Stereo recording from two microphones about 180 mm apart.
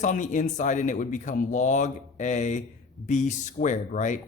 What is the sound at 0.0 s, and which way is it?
A man's voice, 45° left (ahead or behind).